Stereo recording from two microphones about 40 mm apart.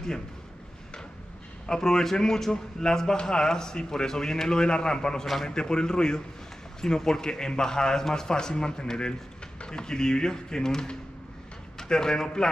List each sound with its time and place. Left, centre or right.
1.7 s a man's voice: centre